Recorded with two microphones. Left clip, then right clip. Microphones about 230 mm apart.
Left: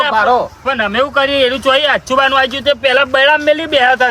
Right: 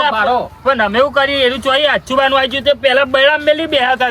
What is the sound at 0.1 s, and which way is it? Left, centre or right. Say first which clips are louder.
Speech: left 3 dB; centre.